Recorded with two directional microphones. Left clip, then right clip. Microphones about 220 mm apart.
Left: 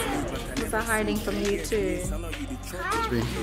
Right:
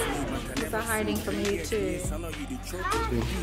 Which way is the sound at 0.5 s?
10° left (ahead or behind).